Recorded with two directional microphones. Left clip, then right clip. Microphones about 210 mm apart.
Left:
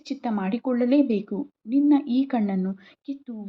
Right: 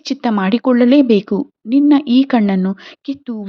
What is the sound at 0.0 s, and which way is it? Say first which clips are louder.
Speech: right 11 dB; 40° right (ahead or behind).